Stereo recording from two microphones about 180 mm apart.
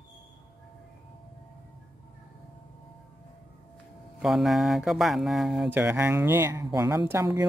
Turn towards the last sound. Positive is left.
turn(degrees=-15)  # may be behind; listen again after turning